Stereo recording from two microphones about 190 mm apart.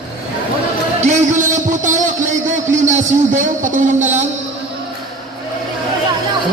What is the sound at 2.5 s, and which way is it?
A man's voice, 40° right (ahead or behind).